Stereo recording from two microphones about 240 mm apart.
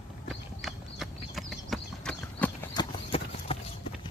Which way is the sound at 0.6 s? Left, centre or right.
Centre.